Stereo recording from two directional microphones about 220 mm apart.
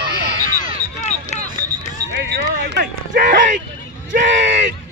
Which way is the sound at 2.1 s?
50° right (ahead or behind).